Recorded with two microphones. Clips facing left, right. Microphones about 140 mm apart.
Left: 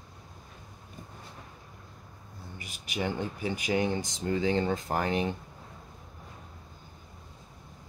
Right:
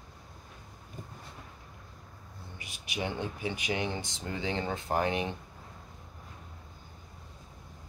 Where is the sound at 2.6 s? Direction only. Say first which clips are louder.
Left 3 dB; 40° left (ahead or behind).